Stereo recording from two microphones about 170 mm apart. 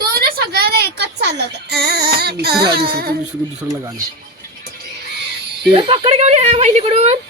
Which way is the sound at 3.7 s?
20° right (ahead or behind).